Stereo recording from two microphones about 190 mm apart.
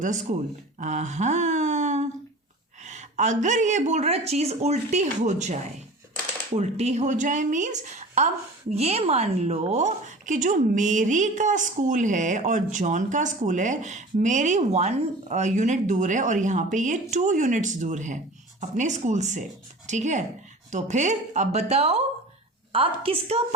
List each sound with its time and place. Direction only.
0.0 s a woman's voice: 40° right (ahead or behind)
0.8 s a sound: 40° right (ahead or behind)
2.8 s a woman's voice: 40° right (ahead or behind)
6.6 s a woman's voice: 35° right (ahead or behind)